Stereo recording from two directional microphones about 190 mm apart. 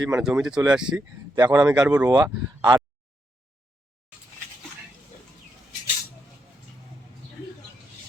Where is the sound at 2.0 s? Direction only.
20° right (ahead or behind).